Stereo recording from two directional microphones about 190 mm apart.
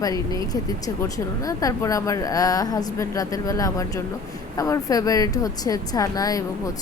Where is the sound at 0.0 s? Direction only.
20° left (ahead or behind).